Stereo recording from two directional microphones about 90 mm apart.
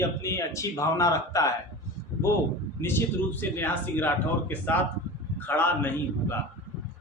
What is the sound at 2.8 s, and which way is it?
A man's voice, 25° left (ahead or behind).